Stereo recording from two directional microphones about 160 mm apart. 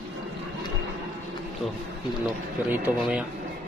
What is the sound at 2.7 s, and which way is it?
Speech, 5° right (ahead or behind).